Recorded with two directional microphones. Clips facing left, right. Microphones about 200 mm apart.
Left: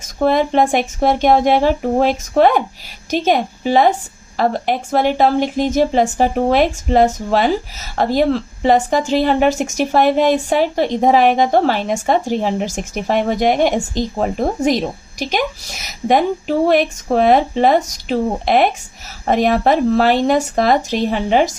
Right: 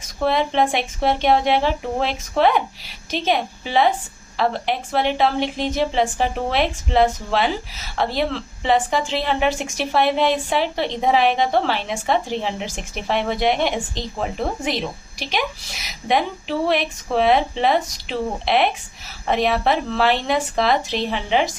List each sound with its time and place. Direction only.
0.2 s a woman's voice: 45° left (ahead or behind)